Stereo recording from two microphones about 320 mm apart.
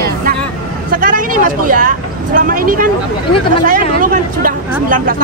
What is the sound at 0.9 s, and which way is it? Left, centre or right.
Speech, right.